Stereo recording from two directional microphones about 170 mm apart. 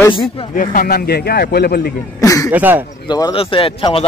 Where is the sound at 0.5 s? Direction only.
55° left (ahead or behind).